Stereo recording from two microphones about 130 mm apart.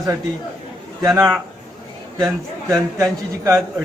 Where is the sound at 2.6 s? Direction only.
20° right (ahead or behind).